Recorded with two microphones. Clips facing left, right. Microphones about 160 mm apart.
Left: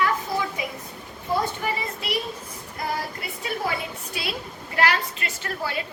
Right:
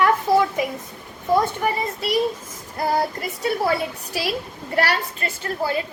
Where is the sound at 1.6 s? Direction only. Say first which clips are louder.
Right 5 dB; 40° right (ahead or behind).